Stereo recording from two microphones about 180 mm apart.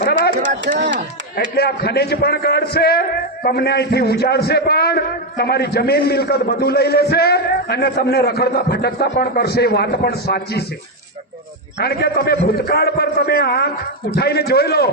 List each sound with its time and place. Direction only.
0.0 s a sound: 60° left (ahead or behind)
1.5 s a man's voice: 60° left (ahead or behind)
11.8 s a man's voice: 60° left (ahead or behind)